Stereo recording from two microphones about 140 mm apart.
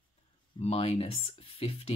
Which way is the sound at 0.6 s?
50° left (ahead or behind).